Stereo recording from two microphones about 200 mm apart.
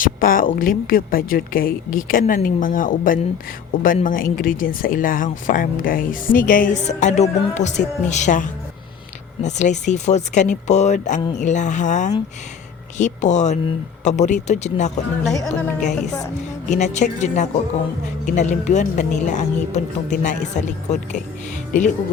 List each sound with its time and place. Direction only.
0.0 s speech: 45° left (ahead or behind)
16.6 s speech: 35° left (ahead or behind)